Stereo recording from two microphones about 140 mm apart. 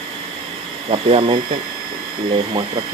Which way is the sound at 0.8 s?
45° right (ahead or behind).